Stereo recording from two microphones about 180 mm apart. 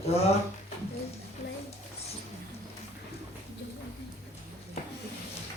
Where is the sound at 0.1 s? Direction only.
35° left (ahead or behind).